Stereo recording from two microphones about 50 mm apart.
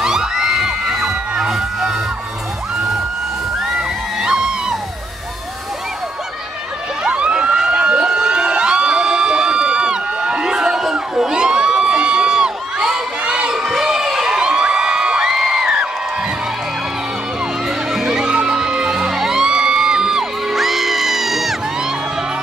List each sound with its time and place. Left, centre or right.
0.0 s crowd: centre
1.5 s music: centre
3.5 s music: centre
7.0 s emergency vehicle: right
13.2 s crowd: centre
17.6 s music: centre